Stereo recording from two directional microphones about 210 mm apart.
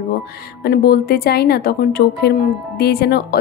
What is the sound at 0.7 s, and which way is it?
Speech, 45° left (ahead or behind).